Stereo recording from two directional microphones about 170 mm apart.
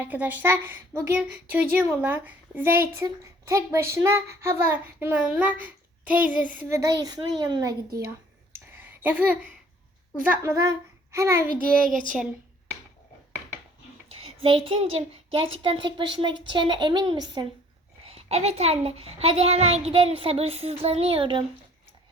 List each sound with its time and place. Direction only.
0.0 s a child's voice: 10° right (ahead or behind)
8.5 s a sound: 10° right (ahead or behind)
10.2 s speech: 10° right (ahead or behind)
14.1 s a child's voice: 35° right (ahead or behind)
18.0 s a child's voice: 40° right (ahead or behind)